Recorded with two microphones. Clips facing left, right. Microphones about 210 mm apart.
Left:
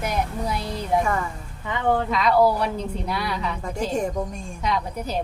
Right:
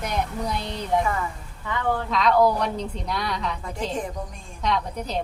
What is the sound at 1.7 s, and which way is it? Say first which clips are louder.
Speech: left 3 dB; 20° left (ahead or behind).